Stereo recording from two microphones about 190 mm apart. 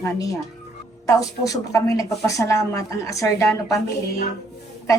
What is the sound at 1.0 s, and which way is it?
A woman's voice, 15° left (ahead or behind).